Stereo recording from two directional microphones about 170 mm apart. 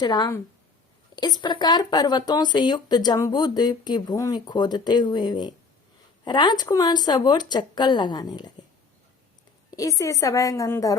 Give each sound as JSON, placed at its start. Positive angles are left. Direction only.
{"t": 0.0, "sound": "speech", "side_deg": 25}
{"t": 9.7, "sound": "speech", "side_deg": 20}